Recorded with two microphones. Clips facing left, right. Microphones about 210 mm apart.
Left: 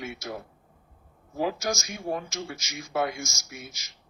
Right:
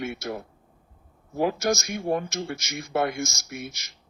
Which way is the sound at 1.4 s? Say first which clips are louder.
Right 5 dB; 60° right (ahead or behind).